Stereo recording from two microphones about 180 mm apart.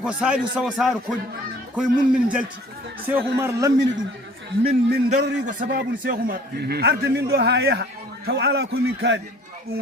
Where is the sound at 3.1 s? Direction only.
15° right (ahead or behind).